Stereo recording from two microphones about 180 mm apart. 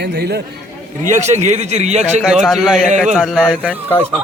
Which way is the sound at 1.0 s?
40° right (ahead or behind).